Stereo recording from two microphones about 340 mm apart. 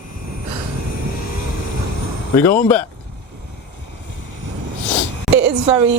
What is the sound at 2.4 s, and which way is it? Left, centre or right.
Speech, centre.